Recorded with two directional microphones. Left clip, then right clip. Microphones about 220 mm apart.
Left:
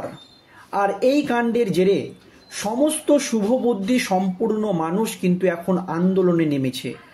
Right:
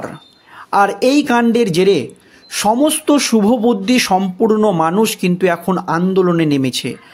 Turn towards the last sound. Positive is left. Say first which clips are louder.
# right 6 dB
turn(degrees=-45)  # may be behind; listen again after turning